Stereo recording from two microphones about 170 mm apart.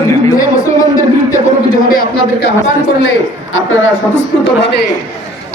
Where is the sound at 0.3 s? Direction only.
20° left (ahead or behind).